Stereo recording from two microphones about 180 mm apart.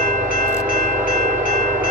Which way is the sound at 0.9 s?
10° right (ahead or behind).